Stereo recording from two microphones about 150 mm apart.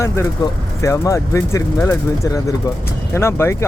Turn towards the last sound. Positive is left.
turn(degrees=20)  # may be behind; listen again after turning